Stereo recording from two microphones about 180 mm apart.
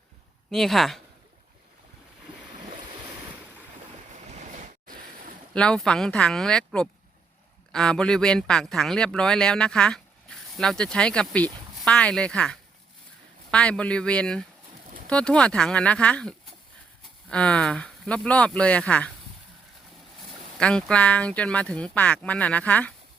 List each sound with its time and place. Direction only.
0.5 s speech: centre (ahead or behind)
4.3 s waves: 45° right (ahead or behind)
5.5 s speech: 5° left (ahead or behind)
20.6 s speech: 5° left (ahead or behind)